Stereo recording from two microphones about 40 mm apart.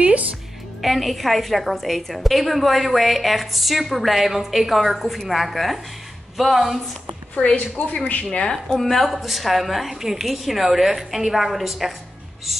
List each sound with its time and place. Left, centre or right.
0.0 s music: right
0.8 s a woman's voice: centre
7.5 s a woman's voice: left
8.3 s speech: left
8.7 s a woman's voice: centre
9.1 s a woman's voice: centre